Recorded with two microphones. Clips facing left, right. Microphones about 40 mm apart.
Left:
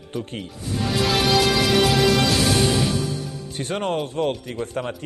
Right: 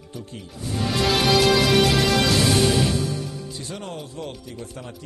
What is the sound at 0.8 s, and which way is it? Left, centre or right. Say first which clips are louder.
Music: even; centre.